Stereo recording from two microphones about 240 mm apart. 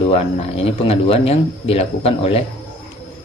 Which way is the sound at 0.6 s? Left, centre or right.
Left.